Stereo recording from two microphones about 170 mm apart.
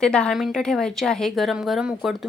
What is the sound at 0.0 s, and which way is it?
A woman's voice, 5° left (ahead or behind).